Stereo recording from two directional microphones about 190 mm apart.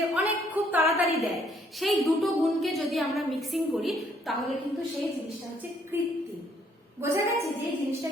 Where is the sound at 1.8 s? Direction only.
Centre (ahead or behind).